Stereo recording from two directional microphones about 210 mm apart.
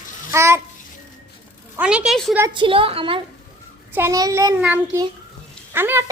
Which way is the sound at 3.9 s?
15° right (ahead or behind).